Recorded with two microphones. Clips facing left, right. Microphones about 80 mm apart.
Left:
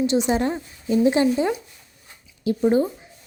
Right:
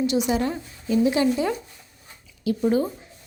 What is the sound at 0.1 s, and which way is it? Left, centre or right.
A woman's voice, left.